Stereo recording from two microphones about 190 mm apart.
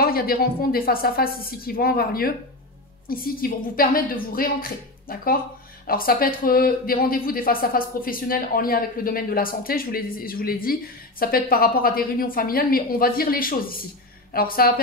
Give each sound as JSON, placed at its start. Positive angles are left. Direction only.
{"t": 0.0, "sound": "speech", "side_deg": 50}